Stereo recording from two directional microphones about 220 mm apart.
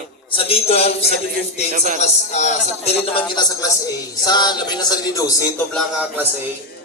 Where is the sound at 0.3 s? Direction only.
25° left (ahead or behind).